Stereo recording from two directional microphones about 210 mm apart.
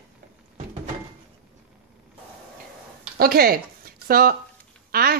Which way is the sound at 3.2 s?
45° right (ahead or behind).